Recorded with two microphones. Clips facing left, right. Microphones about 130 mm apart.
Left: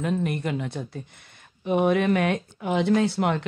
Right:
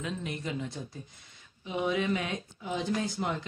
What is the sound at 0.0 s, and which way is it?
Speech, 55° left (ahead or behind).